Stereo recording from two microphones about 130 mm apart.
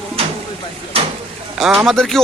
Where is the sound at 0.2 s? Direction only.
50° right (ahead or behind).